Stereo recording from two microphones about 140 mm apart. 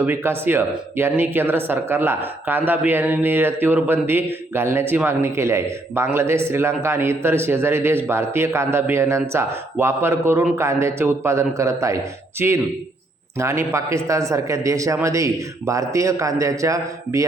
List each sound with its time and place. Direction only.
0.0 s a man's voice: 15° right (ahead or behind)